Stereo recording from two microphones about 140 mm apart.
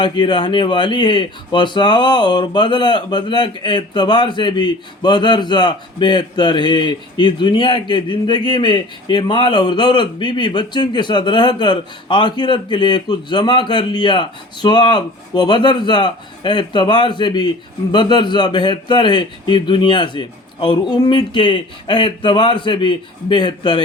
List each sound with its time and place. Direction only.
0.0 s speech: 35° left (ahead or behind)